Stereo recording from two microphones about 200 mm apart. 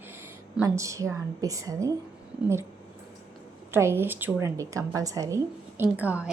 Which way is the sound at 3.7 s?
10° right (ahead or behind).